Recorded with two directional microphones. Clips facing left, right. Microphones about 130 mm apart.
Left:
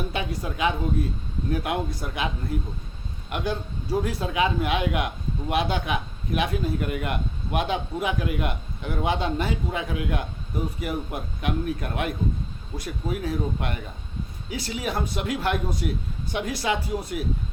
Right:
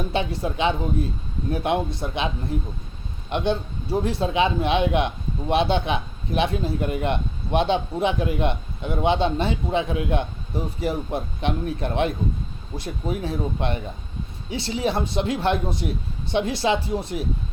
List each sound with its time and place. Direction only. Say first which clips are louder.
0.1 s a man's voice: right 5 dB; 30° right (ahead or behind)